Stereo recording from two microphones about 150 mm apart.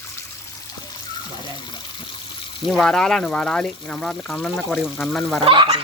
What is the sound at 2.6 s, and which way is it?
Speech, centre (ahead or behind).